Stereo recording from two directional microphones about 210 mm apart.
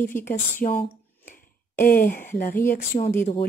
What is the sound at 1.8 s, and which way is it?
Speech, 40° left (ahead or behind).